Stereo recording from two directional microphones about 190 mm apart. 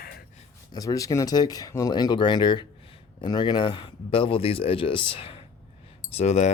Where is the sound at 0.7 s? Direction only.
20° left (ahead or behind).